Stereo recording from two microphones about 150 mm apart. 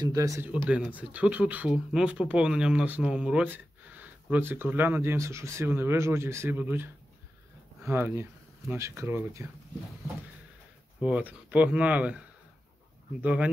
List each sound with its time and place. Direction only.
0.0 s speech: 25° right (ahead or behind)
0.7 s speech: 10° right (ahead or behind)
11.0 s speech: 10° right (ahead or behind)
13.2 s speech: 10° right (ahead or behind)